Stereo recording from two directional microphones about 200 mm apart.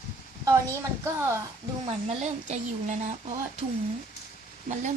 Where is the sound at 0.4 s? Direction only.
15° right (ahead or behind).